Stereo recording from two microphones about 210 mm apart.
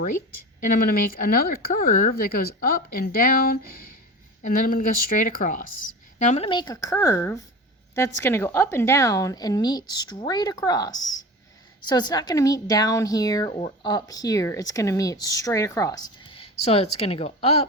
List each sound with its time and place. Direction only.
0.6 s a woman's voice: 45° left (ahead or behind)